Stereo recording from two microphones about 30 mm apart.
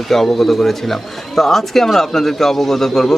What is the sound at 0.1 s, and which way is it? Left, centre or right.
A man's voice, centre.